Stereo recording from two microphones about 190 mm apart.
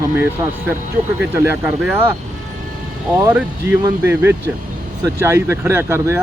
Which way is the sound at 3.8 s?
10° right (ahead or behind).